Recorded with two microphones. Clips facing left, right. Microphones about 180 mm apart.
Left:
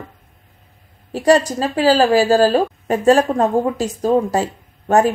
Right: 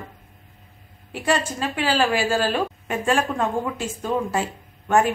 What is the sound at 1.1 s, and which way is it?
Speech, 40° left (ahead or behind).